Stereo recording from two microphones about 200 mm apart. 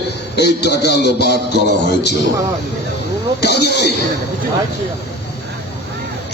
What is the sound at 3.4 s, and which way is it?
Music, 55° left (ahead or behind).